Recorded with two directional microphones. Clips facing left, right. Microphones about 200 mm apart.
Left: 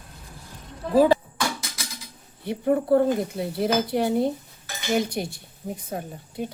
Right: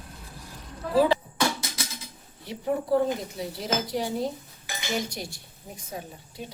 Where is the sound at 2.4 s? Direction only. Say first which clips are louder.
Left 6 dB; 55° left (ahead or behind).